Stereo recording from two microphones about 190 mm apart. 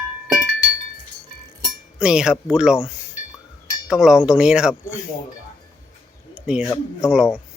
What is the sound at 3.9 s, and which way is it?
Speech, 5° right (ahead or behind).